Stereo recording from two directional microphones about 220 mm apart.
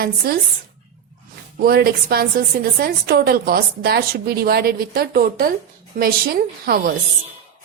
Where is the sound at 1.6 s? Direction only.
45° right (ahead or behind).